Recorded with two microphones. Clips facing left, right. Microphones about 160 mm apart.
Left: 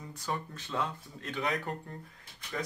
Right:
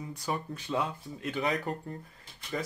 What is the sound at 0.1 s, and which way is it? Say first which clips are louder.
Speech: right 1 dB; 10° right (ahead or behind).